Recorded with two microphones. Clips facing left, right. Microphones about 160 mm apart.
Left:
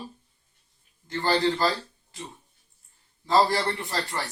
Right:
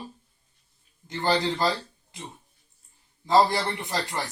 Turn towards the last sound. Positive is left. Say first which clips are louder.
# right 1 dB
turn(degrees=-15)  # may be behind; listen again after turning